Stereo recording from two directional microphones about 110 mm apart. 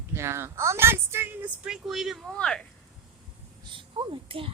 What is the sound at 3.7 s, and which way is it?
Speech, 50° right (ahead or behind).